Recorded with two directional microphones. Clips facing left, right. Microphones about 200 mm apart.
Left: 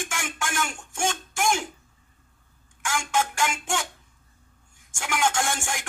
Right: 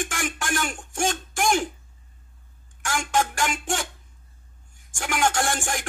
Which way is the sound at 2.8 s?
35° right (ahead or behind).